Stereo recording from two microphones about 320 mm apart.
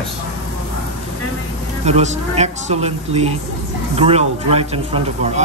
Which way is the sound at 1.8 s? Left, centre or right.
Right.